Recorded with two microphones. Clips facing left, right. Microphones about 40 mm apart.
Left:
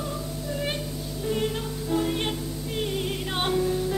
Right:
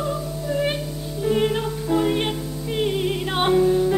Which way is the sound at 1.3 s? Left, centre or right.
Right.